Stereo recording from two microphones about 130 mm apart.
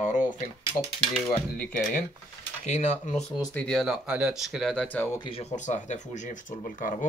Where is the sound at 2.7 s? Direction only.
65° left (ahead or behind).